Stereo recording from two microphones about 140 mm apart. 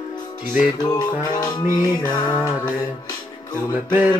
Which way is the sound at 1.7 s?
30° left (ahead or behind).